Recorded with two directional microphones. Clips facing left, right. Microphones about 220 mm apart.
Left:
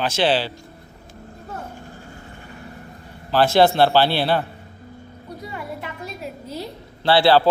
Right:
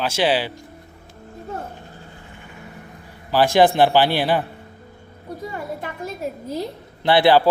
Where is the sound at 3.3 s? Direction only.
15° right (ahead or behind).